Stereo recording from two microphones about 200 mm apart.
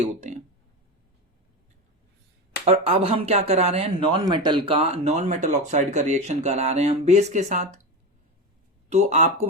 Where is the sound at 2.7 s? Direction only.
30° right (ahead or behind).